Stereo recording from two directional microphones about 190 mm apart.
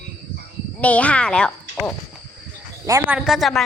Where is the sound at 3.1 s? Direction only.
Centre (ahead or behind).